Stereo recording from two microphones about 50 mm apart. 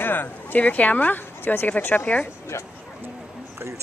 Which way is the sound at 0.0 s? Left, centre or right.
Left.